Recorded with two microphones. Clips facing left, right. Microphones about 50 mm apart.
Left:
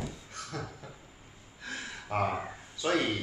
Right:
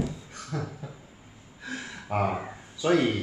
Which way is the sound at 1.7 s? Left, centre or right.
Centre.